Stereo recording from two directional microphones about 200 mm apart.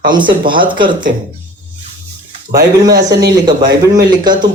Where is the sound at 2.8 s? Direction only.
20° right (ahead or behind).